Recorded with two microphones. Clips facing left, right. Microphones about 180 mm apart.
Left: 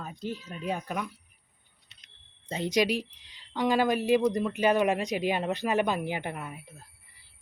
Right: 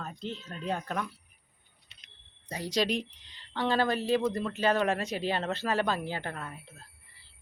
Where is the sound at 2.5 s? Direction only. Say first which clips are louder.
Left 4 dB; 20° left (ahead or behind).